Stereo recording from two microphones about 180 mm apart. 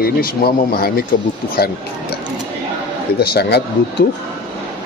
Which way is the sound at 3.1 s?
65° left (ahead or behind).